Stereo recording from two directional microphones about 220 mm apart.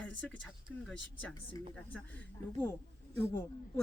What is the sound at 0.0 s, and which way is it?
Speech, 5° left (ahead or behind).